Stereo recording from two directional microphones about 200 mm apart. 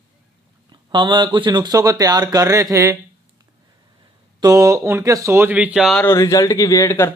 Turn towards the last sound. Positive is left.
turn(degrees=15)  # may be behind; listen again after turning